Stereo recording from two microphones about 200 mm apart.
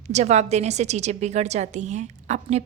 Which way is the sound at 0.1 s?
35° right (ahead or behind).